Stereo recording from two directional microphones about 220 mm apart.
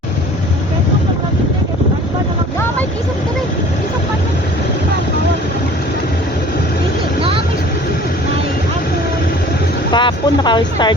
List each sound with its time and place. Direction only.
7.2 s vehicle: 25° right (ahead or behind)
9.9 s speech: 20° left (ahead or behind)